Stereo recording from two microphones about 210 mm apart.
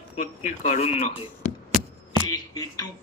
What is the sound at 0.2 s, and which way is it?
Speech, 35° left (ahead or behind).